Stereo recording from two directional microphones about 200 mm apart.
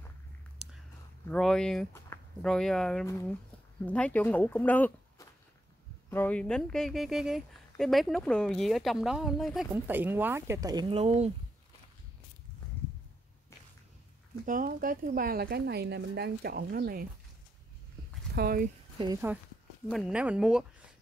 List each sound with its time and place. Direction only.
1.2 s a woman's voice: 5° left (ahead or behind)
2.1 s a sound: 10° left (ahead or behind)
2.4 s a woman's voice: 5° left (ahead or behind)
3.1 s a woman's voice: 15° left (ahead or behind); by 11.3 s 30° right (ahead or behind)
14.4 s a woman's voice: 40° right (ahead or behind)
18.3 s speech: 50° right (ahead or behind)
19.3 s a woman's voice: 10° right (ahead or behind)